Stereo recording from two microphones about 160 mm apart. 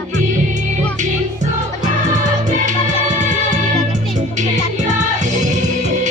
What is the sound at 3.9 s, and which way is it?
Music, 50° right (ahead or behind).